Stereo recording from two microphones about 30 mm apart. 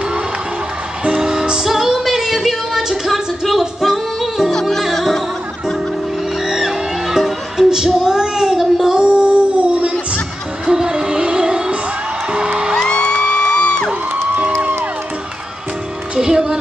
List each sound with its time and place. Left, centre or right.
1.0 s music: right
1.7 s female singing: centre
3.1 s a sound: centre
3.8 s singing: centre
4.5 s music: centre
6.4 s music: centre
8.9 s music: right
10.7 s music: right
12.7 s music: centre; by 13.8 s left
14.3 s music: right
16.2 s music: right